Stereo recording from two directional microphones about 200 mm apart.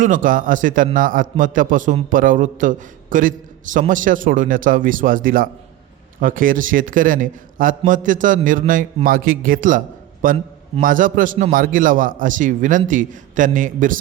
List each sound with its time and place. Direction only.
0.0 s a man's voice: 40° right (ahead or behind)